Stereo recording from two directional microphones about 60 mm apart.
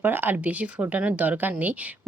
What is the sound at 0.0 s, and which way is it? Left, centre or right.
Speech, right.